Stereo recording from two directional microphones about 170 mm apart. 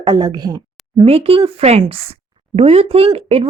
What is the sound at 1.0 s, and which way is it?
Speech, 35° right (ahead or behind).